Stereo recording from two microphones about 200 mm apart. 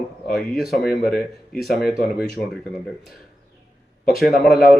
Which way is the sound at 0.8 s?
50° left (ahead or behind).